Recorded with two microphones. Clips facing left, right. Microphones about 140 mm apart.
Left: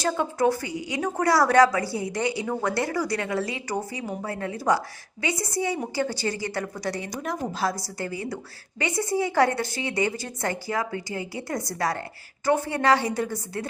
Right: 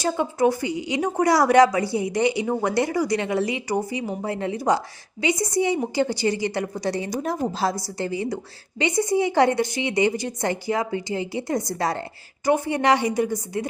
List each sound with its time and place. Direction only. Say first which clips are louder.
0.0 s a woman's voice: right 2 dB; 10° right (ahead or behind)